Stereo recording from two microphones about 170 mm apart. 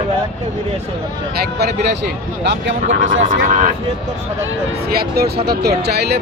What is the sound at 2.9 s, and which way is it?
Speech, 50° right (ahead or behind).